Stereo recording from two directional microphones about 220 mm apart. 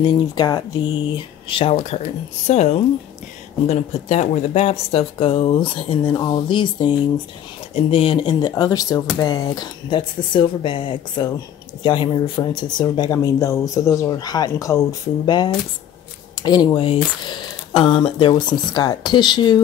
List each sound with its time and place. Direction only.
0.0 s speech: 20° left (ahead or behind)